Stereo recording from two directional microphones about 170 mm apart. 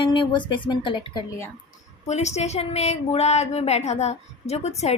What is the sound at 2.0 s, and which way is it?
A woman's voice, 40° left (ahead or behind).